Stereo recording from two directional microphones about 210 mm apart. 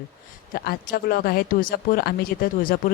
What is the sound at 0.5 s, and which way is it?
Speech, 45° left (ahead or behind).